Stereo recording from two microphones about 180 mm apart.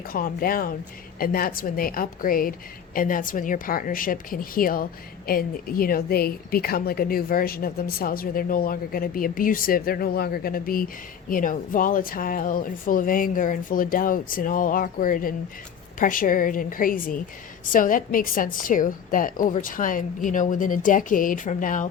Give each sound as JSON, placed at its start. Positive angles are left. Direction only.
{"t": 0.1, "sound": "a woman's voice", "side_deg": 50}